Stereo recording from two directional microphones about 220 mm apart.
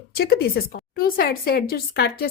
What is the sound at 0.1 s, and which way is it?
A woman's voice, 45° left (ahead or behind).